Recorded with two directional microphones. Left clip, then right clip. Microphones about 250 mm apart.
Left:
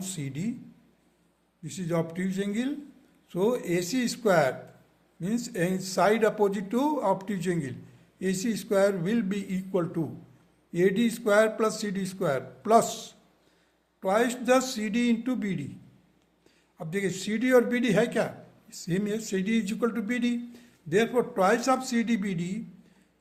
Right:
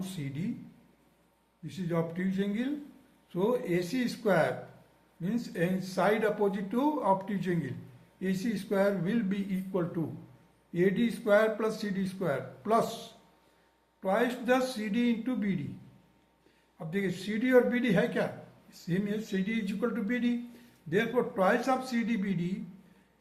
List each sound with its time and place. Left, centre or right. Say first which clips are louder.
0.0 s speech: left 3 dB; left
1.6 s a man's voice: left 3 dB; left
14.0 s a man's voice: left 4 dB; left
16.7 s a man's voice: left 3 dB; left